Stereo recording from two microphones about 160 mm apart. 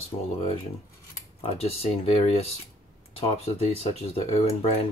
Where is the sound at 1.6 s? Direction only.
40° left (ahead or behind).